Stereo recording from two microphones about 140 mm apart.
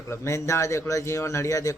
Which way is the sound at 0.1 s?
20° left (ahead or behind).